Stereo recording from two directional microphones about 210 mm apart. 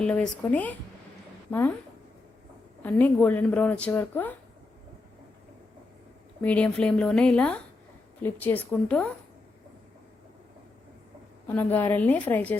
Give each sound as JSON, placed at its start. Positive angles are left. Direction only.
{"t": 0.0, "sound": "a woman's voice", "side_deg": 5}
{"t": 2.8, "sound": "speech", "side_deg": 10}
{"t": 6.4, "sound": "speech", "side_deg": 5}
{"t": 11.4, "sound": "speech", "side_deg": 10}